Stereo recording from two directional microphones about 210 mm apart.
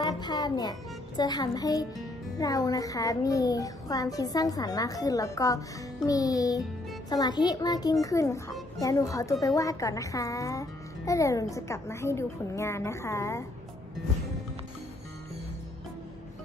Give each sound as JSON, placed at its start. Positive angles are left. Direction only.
{"t": 0.0, "sound": "a child's voice", "side_deg": 20}